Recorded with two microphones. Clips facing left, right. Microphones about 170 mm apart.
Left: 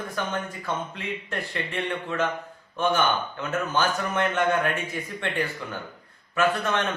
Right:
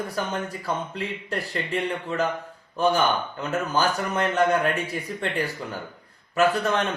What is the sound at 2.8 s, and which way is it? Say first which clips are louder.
A man's voice: right 2 dB; 35° right (ahead or behind).